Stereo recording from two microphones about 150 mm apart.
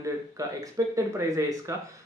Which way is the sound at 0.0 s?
20° right (ahead or behind).